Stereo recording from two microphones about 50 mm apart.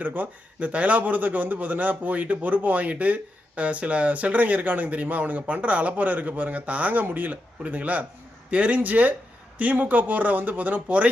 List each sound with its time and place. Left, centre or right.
0.0 s a man's voice: right